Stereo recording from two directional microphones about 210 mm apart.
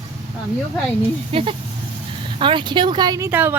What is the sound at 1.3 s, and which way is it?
Speech, 25° right (ahead or behind).